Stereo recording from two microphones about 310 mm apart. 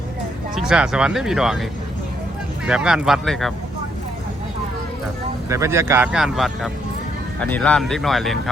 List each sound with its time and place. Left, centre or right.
0.5 s speech: centre
2.6 s speech: centre
5.5 s speech: centre